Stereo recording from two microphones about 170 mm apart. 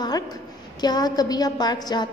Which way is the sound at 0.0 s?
25° left (ahead or behind).